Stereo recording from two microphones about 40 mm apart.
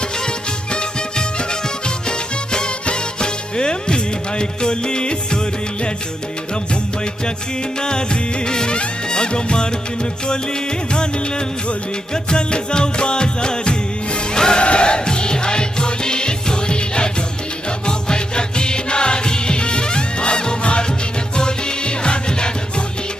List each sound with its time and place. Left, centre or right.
0.7 s music: left
7.8 s music: left